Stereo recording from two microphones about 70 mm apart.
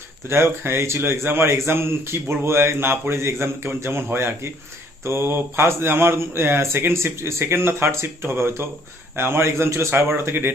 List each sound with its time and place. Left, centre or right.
0.3 s speech: right